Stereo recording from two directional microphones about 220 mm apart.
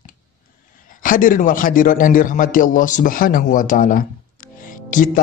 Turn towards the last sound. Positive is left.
turn(degrees=35)  # may be behind; listen again after turning